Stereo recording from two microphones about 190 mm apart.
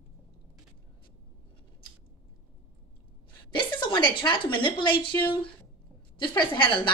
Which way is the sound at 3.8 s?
25° left (ahead or behind).